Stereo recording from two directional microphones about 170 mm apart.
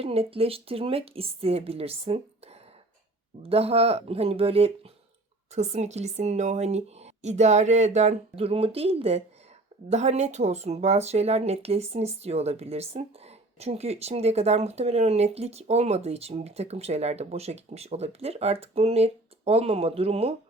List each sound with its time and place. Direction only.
0.0 s speech: 35° right (ahead or behind)